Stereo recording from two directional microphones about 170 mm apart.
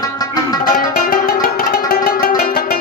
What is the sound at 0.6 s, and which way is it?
Music, 55° left (ahead or behind).